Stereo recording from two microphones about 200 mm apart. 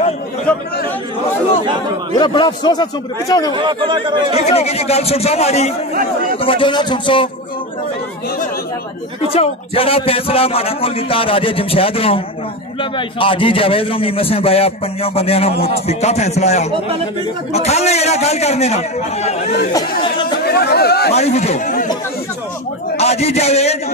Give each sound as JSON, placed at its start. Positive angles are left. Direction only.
{"t": 0.5, "sound": "speech", "side_deg": 5}
{"t": 2.1, "sound": "a man's voice", "side_deg": 20}
{"t": 3.5, "sound": "speech", "side_deg": -25}
{"t": 4.4, "sound": "a man's voice", "side_deg": 30}
{"t": 9.3, "sound": "a man's voice", "side_deg": 30}
{"t": 20.3, "sound": "chatter", "side_deg": 50}
{"t": 21.1, "sound": "a man's voice", "side_deg": 35}
{"t": 22.9, "sound": "a man's voice", "side_deg": 30}